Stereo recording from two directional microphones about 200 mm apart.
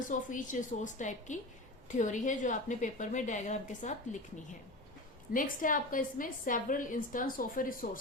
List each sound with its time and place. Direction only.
0.1 s a woman's voice: 40° left (ahead or behind)
5.3 s a woman's voice: 45° left (ahead or behind)